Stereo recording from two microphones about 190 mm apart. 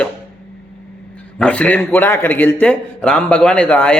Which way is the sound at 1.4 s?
5° left (ahead or behind).